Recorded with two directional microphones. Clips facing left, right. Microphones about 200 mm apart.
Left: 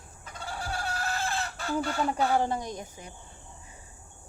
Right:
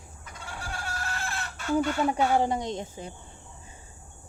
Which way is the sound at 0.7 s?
35° left (ahead or behind).